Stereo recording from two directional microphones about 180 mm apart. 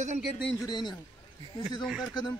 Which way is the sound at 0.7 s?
25° left (ahead or behind).